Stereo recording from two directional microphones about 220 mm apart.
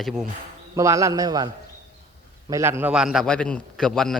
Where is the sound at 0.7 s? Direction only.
15° right (ahead or behind).